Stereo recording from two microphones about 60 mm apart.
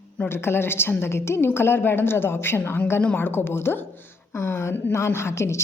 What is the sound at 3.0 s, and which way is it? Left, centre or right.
Speech, left.